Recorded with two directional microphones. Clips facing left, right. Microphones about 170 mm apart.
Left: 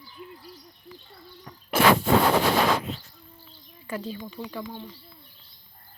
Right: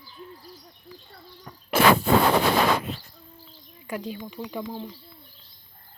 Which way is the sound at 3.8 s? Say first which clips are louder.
Right 1 dB; 15° right (ahead or behind).